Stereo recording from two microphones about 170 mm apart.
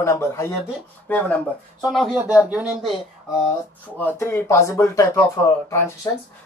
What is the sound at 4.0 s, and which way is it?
Speech, 10° left (ahead or behind).